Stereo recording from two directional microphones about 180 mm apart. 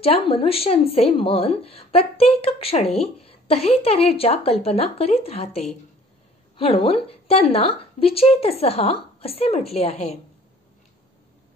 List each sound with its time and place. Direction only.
0.0 s a woman's voice: 35° left (ahead or behind)